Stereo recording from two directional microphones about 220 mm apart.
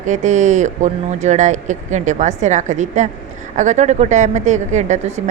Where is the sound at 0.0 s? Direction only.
35° right (ahead or behind).